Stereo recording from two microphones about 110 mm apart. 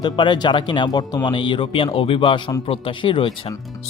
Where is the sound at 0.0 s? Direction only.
45° left (ahead or behind).